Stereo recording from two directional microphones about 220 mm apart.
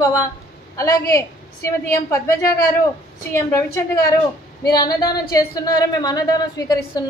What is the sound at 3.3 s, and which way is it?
Speech, 10° left (ahead or behind).